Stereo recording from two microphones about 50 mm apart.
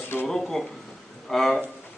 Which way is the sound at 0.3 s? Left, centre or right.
Centre.